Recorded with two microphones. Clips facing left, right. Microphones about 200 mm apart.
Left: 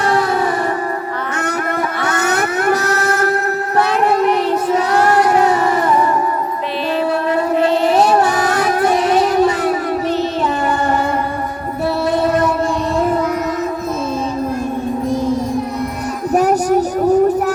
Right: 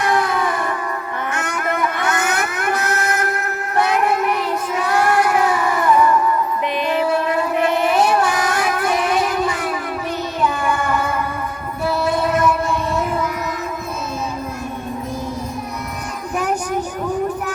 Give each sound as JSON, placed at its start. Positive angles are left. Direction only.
{"t": 4.2, "sound": "child singing", "side_deg": 30}
{"t": 5.2, "sound": "a sound", "side_deg": 25}
{"t": 5.8, "sound": "music", "side_deg": 35}
{"t": 7.9, "sound": "child singing", "side_deg": 25}
{"t": 8.5, "sound": "music", "side_deg": 25}
{"t": 9.0, "sound": "music", "side_deg": 40}
{"t": 10.7, "sound": "music", "side_deg": 25}
{"t": 16.3, "sound": "child singing", "side_deg": 40}